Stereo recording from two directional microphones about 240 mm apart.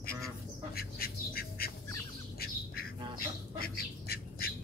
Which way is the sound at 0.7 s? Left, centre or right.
Left.